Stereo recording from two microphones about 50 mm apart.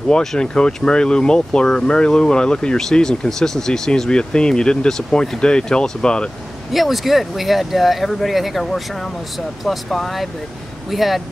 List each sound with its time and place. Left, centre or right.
0.1 s speech: centre
6.7 s speech: centre